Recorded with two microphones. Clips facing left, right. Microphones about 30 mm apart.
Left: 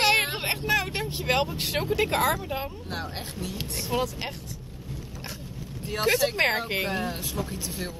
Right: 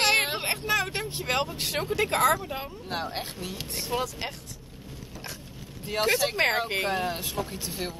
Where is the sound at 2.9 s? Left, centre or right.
Centre.